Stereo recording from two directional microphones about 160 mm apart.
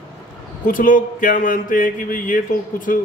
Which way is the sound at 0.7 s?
55° left (ahead or behind).